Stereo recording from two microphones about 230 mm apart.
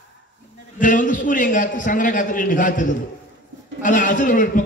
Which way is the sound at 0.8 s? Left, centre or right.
Left.